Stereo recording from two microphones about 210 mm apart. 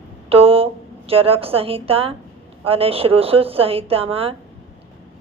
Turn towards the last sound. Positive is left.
turn(degrees=-25)  # may be behind; listen again after turning